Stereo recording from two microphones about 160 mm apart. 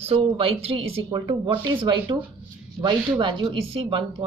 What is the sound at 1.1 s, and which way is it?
Speech, 25° right (ahead or behind).